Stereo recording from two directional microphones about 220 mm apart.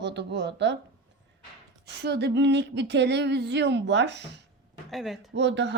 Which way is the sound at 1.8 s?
50° right (ahead or behind).